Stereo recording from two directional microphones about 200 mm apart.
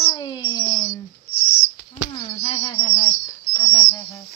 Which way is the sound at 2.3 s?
30° left (ahead or behind).